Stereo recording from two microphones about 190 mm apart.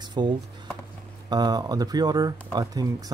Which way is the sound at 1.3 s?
20° right (ahead or behind).